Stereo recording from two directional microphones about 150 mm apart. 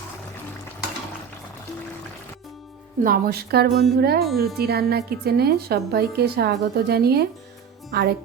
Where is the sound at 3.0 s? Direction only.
80° right.